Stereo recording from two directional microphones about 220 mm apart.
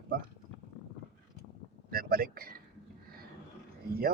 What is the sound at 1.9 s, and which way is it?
Speech, 40° right (ahead or behind).